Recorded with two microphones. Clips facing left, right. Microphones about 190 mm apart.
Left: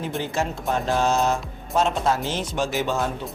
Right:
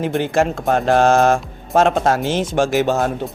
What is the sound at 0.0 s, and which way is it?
Speech, 85° right.